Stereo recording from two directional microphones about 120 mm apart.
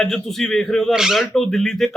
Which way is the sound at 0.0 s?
5° left (ahead or behind).